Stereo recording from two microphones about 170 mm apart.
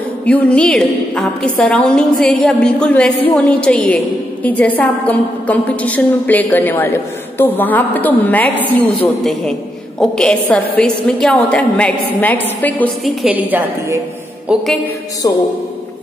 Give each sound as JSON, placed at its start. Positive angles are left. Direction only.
{"t": 0.2, "sound": "a woman's voice", "side_deg": 5}
{"t": 13.2, "sound": "a woman's voice", "side_deg": -10}
{"t": 14.5, "sound": "a sound", "side_deg": -5}
{"t": 15.2, "sound": "speech", "side_deg": 20}